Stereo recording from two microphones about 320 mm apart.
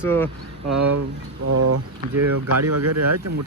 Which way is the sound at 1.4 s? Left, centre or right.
Right.